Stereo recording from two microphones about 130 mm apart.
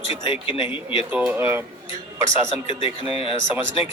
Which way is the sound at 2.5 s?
45° left (ahead or behind).